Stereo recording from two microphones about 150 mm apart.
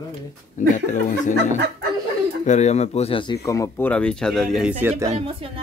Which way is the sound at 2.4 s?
50° left (ahead or behind).